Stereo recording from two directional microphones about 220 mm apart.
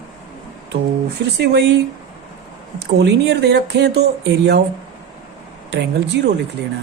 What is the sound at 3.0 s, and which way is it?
Speech, 50° right (ahead or behind).